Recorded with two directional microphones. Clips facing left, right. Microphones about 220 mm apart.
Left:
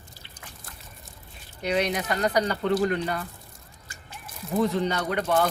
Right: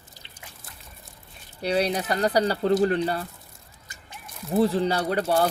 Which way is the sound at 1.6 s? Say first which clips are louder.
Right 2 dB; 35° right (ahead or behind).